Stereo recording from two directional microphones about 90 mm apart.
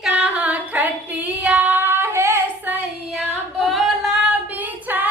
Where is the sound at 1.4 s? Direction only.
15° right (ahead or behind).